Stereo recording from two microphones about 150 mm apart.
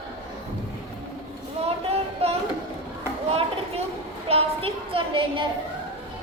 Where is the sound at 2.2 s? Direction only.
40° right (ahead or behind).